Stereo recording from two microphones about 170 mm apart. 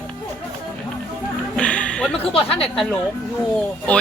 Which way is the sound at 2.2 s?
35° left (ahead or behind).